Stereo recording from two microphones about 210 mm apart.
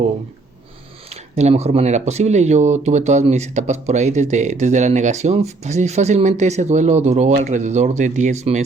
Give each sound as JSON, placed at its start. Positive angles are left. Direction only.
{"t": 1.1, "sound": "speech", "side_deg": -30}